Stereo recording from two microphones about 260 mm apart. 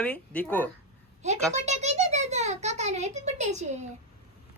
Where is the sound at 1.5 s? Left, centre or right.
Right.